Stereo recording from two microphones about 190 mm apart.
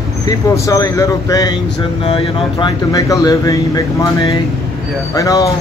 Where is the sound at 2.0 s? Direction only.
30° left (ahead or behind).